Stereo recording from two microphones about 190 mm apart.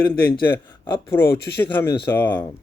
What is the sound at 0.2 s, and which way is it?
Speech, 55° left (ahead or behind).